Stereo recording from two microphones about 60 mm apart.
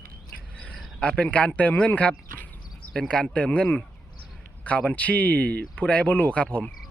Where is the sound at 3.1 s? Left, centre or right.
Centre.